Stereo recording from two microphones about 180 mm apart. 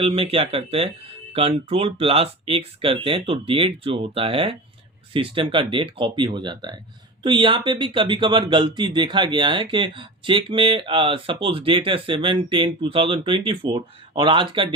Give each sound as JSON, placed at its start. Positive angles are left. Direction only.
{"t": 0.0, "sound": "speech", "side_deg": -35}